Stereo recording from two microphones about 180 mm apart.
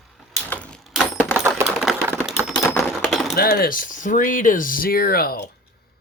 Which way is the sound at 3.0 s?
Centre (ahead or behind).